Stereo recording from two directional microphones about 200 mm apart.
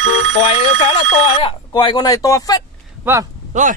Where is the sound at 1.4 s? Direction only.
25° left (ahead or behind).